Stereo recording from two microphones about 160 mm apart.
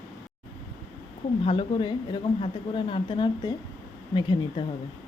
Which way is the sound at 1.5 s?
30° left (ahead or behind).